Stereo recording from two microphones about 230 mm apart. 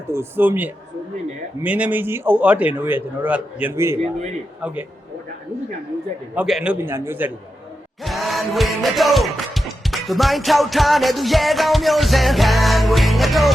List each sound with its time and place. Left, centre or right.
0.1 s a man's voice: centre
4.0 s a man's voice: right
4.6 s a man's voice: centre
6.3 s a man's voice: centre
8.0 s music: centre